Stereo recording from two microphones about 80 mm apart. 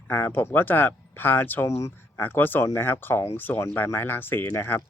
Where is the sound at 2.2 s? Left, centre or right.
Left.